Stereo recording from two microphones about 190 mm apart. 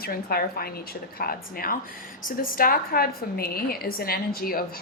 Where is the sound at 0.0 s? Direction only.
55° left (ahead or behind).